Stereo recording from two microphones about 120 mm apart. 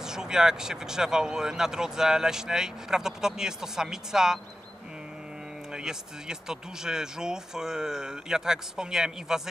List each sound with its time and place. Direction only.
0.0 s speech: 5° right (ahead or behind)
5.7 s speech: 5° right (ahead or behind)